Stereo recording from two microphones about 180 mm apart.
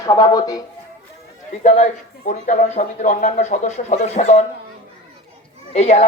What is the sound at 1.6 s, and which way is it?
A man's voice, 40° left (ahead or behind).